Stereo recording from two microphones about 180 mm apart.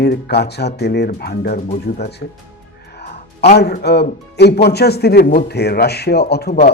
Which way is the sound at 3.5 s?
65° left (ahead or behind).